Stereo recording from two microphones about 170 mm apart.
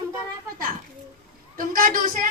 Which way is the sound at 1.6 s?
55° right (ahead or behind).